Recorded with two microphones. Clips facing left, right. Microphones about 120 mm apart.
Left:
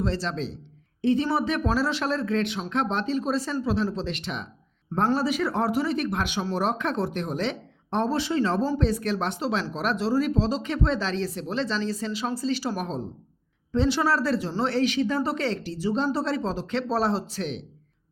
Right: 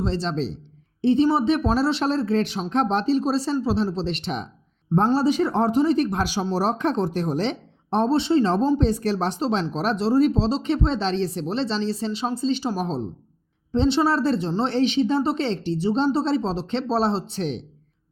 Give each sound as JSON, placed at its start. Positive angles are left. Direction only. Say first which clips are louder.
{"t": 0.0, "sound": "speech", "louder": "right 3 dB", "side_deg": -30}